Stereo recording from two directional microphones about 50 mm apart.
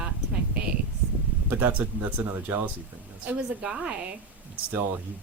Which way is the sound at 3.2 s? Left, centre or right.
Centre.